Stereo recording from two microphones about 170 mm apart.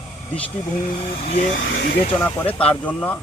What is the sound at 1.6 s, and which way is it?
Speech, 85° left.